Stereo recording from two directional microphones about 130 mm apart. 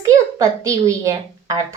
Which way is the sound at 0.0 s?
25° right (ahead or behind).